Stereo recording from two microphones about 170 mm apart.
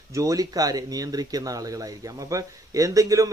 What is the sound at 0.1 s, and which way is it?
Speech, 20° right (ahead or behind).